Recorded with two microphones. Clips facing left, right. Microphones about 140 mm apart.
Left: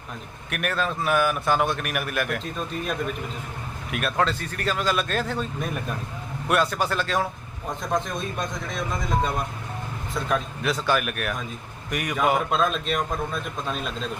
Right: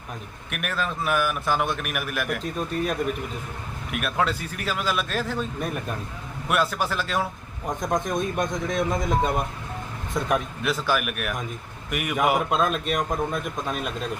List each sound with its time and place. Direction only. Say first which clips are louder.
0.5 s a man's voice: left 2 dB; centre (ahead or behind)
3.9 s a man's voice: left 1 dB; 5° right (ahead or behind)
7.8 s a man's voice: right 2 dB; 15° right (ahead or behind)
10.6 s a man's voice: left 1 dB; 5° right (ahead or behind)